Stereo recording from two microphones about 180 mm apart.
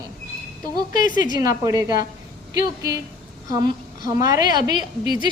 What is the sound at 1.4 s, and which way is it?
A woman's voice, 20° right (ahead or behind).